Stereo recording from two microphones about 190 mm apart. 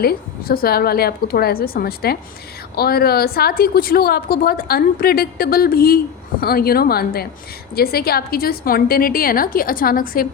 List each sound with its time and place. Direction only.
0.0 s a woman's voice: 55° left (ahead or behind)